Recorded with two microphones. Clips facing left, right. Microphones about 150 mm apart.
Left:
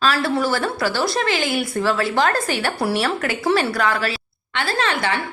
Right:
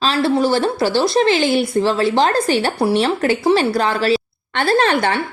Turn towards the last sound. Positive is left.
turn(degrees=-35)  # may be behind; listen again after turning